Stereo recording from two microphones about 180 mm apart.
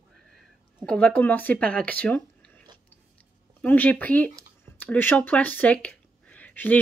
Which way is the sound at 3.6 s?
10° left (ahead or behind).